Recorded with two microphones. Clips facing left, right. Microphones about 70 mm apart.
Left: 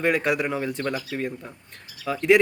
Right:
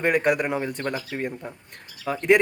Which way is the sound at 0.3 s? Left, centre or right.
Centre.